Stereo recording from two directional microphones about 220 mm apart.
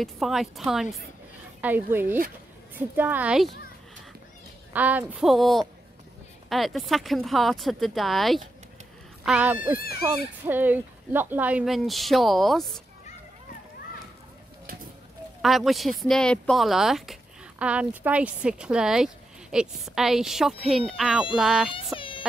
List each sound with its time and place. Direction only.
0.0 s a woman's voice: centre (ahead or behind)
4.7 s a woman's voice: 5° right (ahead or behind)
15.4 s a woman's voice: centre (ahead or behind)
21.9 s music: 25° left (ahead or behind)